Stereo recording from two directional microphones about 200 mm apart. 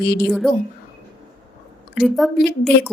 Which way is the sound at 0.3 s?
Centre (ahead or behind).